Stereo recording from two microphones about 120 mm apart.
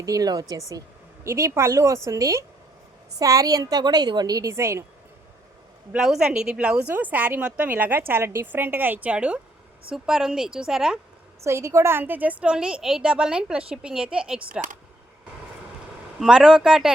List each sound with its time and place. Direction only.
0.0 s a woman's voice: 30° right (ahead or behind)
5.9 s a woman's voice: 5° right (ahead or behind)
11.4 s a woman's voice: 25° right (ahead or behind); by 14.6 s 10° right (ahead or behind)
16.2 s a woman's voice: 5° right (ahead or behind)